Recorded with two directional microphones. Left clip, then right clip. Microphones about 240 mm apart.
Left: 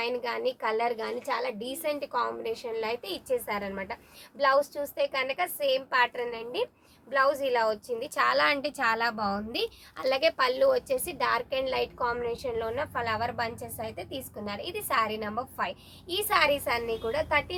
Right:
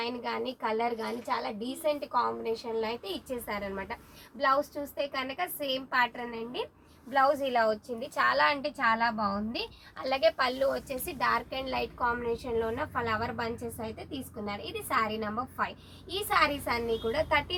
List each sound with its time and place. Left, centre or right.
0.0 s a woman's voice: left
17.1 s a woman's voice: centre